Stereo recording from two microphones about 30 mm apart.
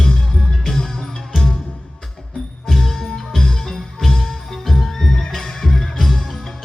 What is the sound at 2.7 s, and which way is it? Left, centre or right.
Music, centre.